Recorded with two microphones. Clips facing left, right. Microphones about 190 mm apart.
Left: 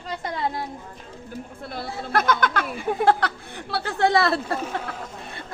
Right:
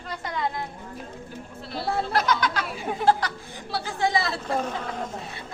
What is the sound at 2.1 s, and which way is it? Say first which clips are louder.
Speech: left 6 dB; 55° left (ahead or behind).